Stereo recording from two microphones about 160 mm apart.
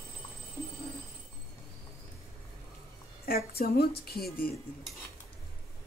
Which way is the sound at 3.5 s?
75° left (ahead or behind).